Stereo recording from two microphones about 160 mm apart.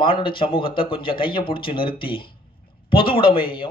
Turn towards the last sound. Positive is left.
turn(degrees=35)  # may be behind; listen again after turning